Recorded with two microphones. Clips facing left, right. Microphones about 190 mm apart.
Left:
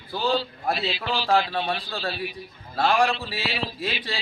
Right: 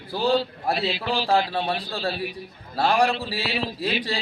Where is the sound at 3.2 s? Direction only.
35° right (ahead or behind).